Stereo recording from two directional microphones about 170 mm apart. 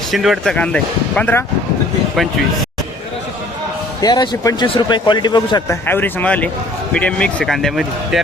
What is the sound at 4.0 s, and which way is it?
Speech, 25° left (ahead or behind).